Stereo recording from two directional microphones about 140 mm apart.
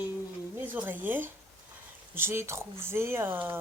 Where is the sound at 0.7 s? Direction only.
15° right (ahead or behind).